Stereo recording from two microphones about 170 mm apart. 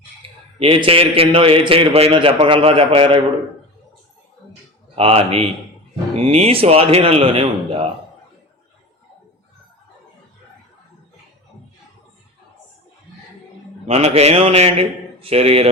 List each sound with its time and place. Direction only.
0.6 s a man's voice: 30° right (ahead or behind)
4.9 s a man's voice: 35° right (ahead or behind)
13.8 s a man's voice: 35° right (ahead or behind)